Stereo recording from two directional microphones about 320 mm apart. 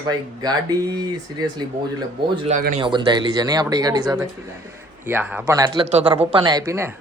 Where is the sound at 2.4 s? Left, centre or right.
Right.